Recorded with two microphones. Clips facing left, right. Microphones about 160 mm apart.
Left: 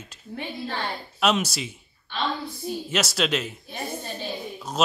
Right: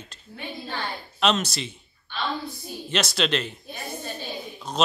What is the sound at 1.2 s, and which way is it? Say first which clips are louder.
Speech: even; 10° left (ahead or behind).